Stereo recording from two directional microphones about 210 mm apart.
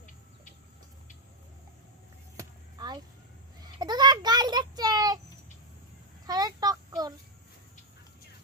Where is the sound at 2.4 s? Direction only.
20° right (ahead or behind).